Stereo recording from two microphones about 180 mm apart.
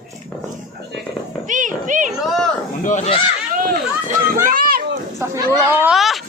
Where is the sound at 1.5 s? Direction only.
45° right (ahead or behind).